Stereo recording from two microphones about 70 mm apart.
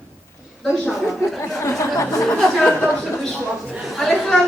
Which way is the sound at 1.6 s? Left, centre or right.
Left.